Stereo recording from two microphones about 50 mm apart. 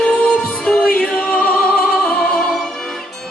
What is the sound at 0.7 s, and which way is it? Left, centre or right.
Music, centre.